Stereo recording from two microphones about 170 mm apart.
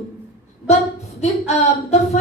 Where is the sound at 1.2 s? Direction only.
40° left (ahead or behind).